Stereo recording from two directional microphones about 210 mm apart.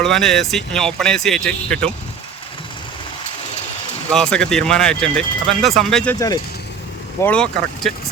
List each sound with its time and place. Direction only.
0.0 s speech: centre (ahead or behind)
4.1 s speech: 5° left (ahead or behind)
6.1 s speech: 15° left (ahead or behind)
7.2 s speech: 5° left (ahead or behind)